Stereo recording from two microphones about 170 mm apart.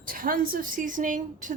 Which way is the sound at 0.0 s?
55° right (ahead or behind).